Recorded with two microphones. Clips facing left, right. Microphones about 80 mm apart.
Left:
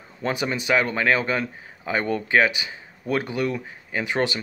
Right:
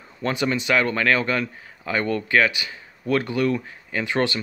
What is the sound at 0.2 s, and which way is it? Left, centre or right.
A man's voice, centre.